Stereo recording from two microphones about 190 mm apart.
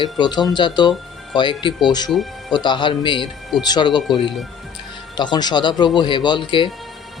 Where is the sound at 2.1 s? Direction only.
Centre (ahead or behind).